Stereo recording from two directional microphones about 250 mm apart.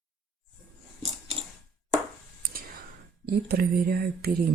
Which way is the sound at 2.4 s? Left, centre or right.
Right.